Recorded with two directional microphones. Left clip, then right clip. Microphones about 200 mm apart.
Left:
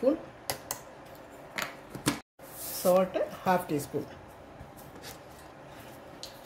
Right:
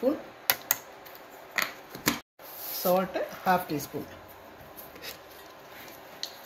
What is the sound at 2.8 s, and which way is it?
Speech, 5° left (ahead or behind).